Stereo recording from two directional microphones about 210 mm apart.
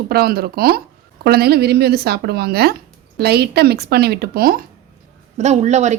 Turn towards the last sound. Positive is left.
turn(degrees=-35)  # may be behind; listen again after turning